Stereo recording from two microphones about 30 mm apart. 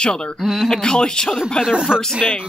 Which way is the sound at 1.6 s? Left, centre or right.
Right.